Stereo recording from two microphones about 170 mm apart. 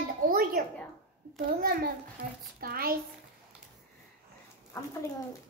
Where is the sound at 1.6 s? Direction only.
60° right (ahead or behind).